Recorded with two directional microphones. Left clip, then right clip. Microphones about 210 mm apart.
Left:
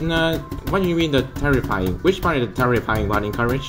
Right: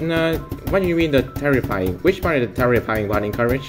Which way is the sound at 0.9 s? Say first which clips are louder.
Right 1 dB; 10° left (ahead or behind).